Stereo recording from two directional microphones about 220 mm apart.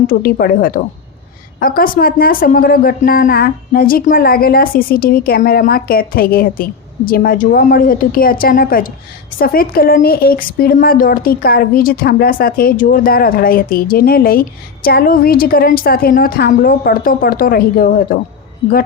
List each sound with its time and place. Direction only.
0.1 s a man's voice: 40° left (ahead or behind)